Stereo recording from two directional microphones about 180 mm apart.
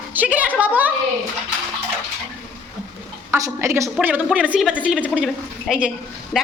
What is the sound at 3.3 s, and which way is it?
A woman's voice, 15° right (ahead or behind).